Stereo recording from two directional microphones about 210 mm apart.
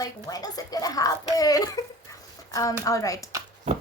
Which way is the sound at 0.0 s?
15° left (ahead or behind).